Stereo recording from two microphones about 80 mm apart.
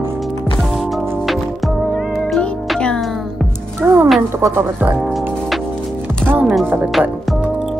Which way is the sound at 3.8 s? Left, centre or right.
Right.